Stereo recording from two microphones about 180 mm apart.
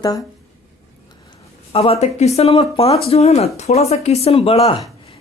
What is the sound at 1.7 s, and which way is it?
Speech, 35° left (ahead or behind).